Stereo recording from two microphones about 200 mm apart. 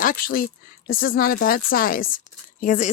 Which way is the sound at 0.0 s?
45° left (ahead or behind).